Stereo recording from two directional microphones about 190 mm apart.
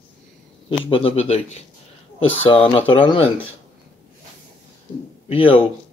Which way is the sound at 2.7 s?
30° left (ahead or behind).